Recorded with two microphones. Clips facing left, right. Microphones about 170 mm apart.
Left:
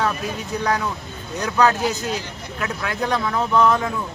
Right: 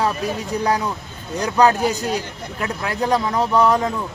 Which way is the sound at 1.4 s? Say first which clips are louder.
Right 3 dB; 35° right (ahead or behind).